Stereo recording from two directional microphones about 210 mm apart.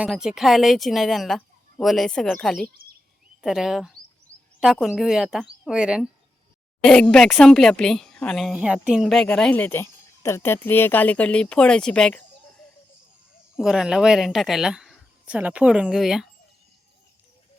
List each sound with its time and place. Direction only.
0.0 s speech: 5° right (ahead or behind)
4.3 s a sound: 5° left (ahead or behind)
4.6 s speech: centre (ahead or behind)
13.6 s speech: 5° right (ahead or behind)